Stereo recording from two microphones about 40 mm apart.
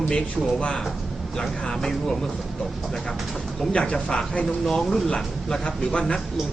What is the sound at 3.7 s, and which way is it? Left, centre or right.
Speech, left.